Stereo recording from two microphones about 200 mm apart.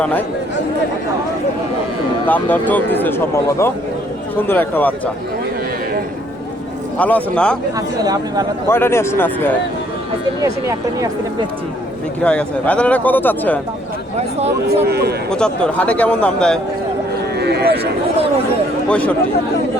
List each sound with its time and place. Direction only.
0.0 s speech: 10° left (ahead or behind)
2.2 s speech: 10° left (ahead or behind)
7.0 s speech: 5° left (ahead or behind)
7.8 s speech: 20° right (ahead or behind)
8.7 s speech: 10° left (ahead or behind)
10.4 s speech: 15° right (ahead or behind)
12.2 s speech: 5° left (ahead or behind)
14.7 s a man's voice: 55° right (ahead or behind)
15.3 s speech: 5° left (ahead or behind)
17.3 s vehicle: 55° right (ahead or behind)
18.9 s speech: 5° left (ahead or behind)